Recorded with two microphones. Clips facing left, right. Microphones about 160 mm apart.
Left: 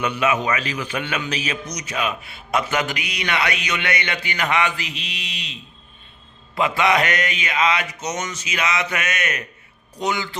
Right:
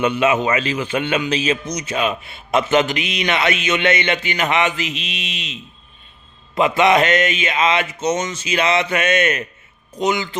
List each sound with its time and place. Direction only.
0.0 s a man's voice: 25° right (ahead or behind)